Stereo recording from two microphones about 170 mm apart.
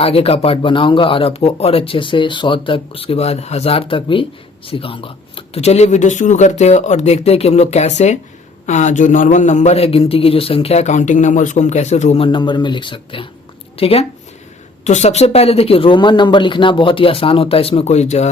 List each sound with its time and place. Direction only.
0.0 s speech: 35° left (ahead or behind)